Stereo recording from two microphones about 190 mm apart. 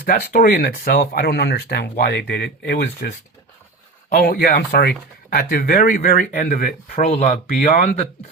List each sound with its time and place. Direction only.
0.0 s speech: 50° left (ahead or behind)
4.1 s speech: 50° left (ahead or behind)